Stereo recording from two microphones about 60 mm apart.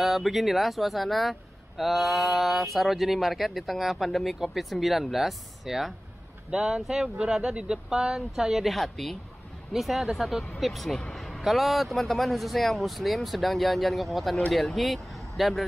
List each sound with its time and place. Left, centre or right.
0.0 s speech: centre